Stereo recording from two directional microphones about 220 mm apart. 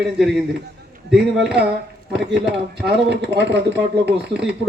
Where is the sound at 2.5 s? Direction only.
50° right (ahead or behind).